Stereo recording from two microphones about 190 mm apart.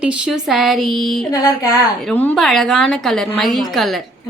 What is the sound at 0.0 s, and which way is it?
A woman's voice, 5° right (ahead or behind).